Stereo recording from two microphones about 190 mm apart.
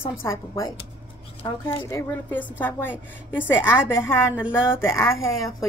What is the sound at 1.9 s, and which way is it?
A woman's voice, 15° left (ahead or behind).